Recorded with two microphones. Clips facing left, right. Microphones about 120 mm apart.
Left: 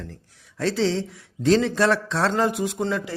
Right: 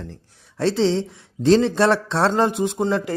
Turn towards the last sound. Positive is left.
turn(degrees=-25)  # may be behind; listen again after turning